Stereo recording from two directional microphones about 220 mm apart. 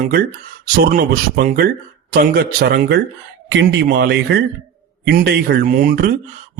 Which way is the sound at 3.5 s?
55° right (ahead or behind).